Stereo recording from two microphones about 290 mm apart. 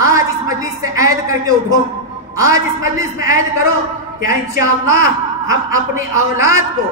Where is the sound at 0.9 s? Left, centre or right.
Centre.